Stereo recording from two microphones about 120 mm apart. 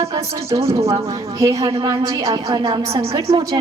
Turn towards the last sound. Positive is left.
turn(degrees=-30)  # may be behind; listen again after turning